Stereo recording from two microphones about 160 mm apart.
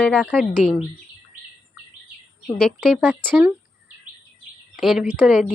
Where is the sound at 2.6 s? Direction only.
Centre (ahead or behind).